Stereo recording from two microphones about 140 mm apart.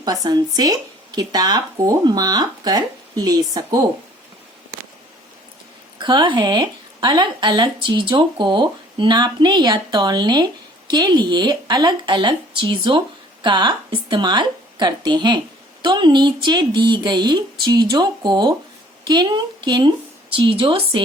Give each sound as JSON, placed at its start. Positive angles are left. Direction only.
{"t": 0.0, "sound": "speech", "side_deg": -25}
{"t": 6.0, "sound": "speech", "side_deg": -35}